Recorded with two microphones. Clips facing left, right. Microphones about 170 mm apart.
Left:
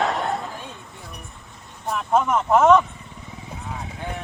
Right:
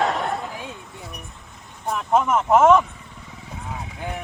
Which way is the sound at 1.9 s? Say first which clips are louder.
Right 1 dB; 5° right (ahead or behind).